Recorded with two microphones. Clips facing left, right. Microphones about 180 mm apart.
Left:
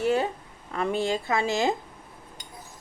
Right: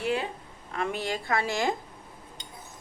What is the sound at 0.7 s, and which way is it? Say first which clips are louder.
A woman's voice: left 4 dB; 35° left (ahead or behind).